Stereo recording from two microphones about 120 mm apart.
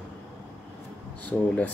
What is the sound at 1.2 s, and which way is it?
Speech, 10° left (ahead or behind).